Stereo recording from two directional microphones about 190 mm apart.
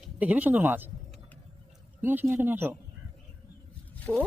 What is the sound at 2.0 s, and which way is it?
Speech, 10° right (ahead or behind).